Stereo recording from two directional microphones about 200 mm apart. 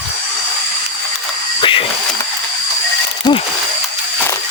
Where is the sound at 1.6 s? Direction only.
25° left (ahead or behind).